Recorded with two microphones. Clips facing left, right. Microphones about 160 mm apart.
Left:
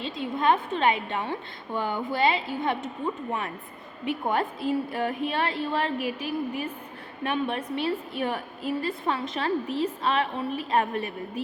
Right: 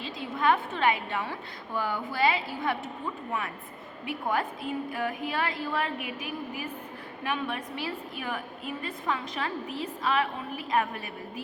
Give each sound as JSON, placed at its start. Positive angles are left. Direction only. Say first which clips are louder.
{"t": 0.0, "sound": "a woman's voice", "louder": "left 2 dB", "side_deg": 25}
{"t": 4.0, "sound": "a woman's voice", "louder": "left 3 dB", "side_deg": 25}